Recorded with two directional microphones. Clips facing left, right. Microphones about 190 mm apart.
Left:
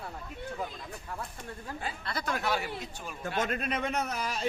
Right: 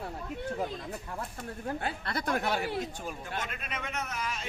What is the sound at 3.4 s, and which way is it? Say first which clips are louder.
A man's voice: left 7 dB; 40° left (ahead or behind).